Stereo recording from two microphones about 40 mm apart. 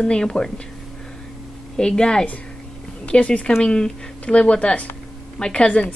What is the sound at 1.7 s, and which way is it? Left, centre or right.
Speech, centre.